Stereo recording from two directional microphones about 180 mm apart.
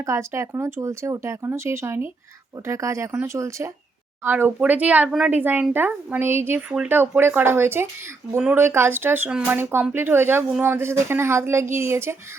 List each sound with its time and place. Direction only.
0.0 s speech: 15° right (ahead or behind)